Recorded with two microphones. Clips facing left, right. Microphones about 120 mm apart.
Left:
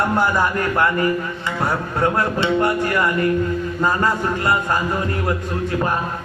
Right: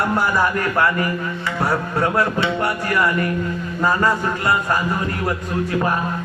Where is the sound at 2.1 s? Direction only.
25° left (ahead or behind).